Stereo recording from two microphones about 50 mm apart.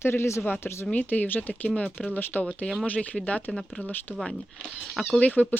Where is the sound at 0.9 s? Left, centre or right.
Left.